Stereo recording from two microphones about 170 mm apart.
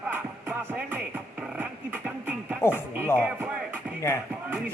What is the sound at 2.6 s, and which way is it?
Speech, 15° left (ahead or behind).